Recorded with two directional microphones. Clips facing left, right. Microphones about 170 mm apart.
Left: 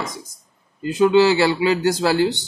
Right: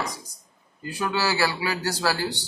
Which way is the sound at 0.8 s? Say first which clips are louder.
Left 12 dB; 20° left (ahead or behind).